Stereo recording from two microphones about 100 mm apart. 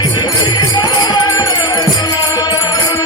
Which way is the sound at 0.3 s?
40° left (ahead or behind).